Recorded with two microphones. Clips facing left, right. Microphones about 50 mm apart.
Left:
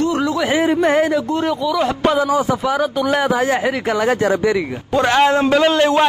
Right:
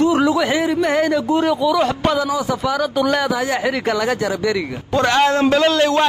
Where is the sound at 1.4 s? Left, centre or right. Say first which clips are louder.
Right 2 dB; centre.